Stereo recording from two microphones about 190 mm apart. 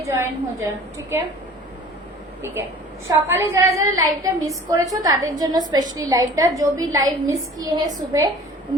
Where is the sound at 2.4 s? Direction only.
15° right (ahead or behind).